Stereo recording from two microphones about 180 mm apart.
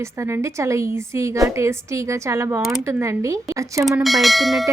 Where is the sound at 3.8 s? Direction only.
Centre (ahead or behind).